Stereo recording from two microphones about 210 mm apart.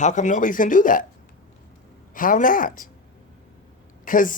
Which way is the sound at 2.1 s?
40° left (ahead or behind).